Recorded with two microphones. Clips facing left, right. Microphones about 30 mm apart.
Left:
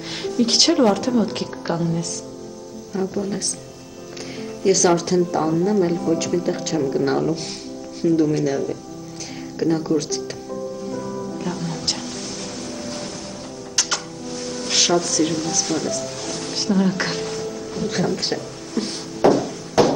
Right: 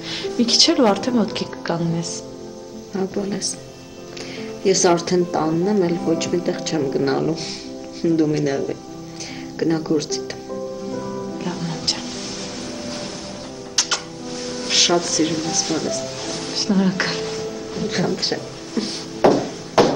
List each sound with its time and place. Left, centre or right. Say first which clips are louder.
0.1 s speech: right 1 dB; centre
4.6 s speech: even; centre
10.9 s music: right 1 dB; centre
12.8 s boat: right 1 dB; centre
13.7 s music: right 1 dB; centre